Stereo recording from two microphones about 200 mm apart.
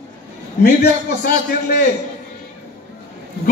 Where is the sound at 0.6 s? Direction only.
50° left (ahead or behind).